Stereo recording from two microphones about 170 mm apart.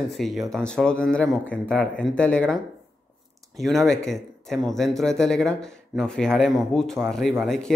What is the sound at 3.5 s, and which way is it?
Speech, centre (ahead or behind).